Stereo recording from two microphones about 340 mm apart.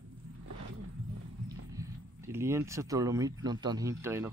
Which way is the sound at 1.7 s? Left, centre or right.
Centre.